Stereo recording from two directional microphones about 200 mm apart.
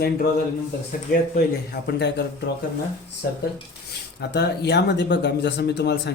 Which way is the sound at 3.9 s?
55° left (ahead or behind).